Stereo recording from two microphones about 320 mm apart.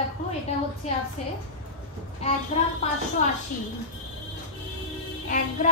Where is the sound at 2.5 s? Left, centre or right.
Left.